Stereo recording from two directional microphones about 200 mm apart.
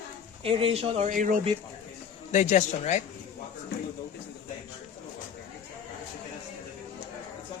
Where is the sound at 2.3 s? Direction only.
35° left (ahead or behind).